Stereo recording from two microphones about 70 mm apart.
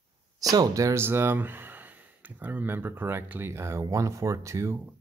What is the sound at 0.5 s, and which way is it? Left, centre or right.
Speech, right.